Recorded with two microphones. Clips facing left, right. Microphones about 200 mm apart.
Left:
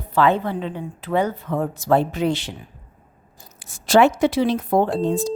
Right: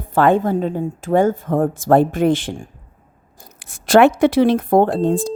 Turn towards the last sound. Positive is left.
turn(degrees=-55)  # may be behind; listen again after turning